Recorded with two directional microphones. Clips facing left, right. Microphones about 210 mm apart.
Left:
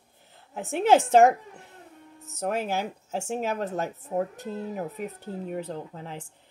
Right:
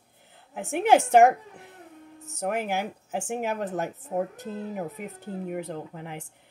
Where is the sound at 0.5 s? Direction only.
15° right (ahead or behind).